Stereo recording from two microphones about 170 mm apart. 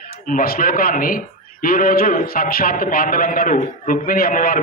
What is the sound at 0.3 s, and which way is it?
A man's voice, 55° left (ahead or behind).